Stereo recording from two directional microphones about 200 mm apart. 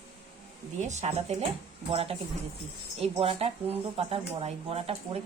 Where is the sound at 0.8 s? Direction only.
35° right (ahead or behind).